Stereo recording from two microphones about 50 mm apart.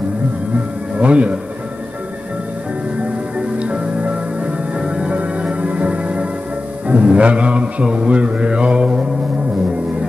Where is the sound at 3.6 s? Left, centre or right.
Right.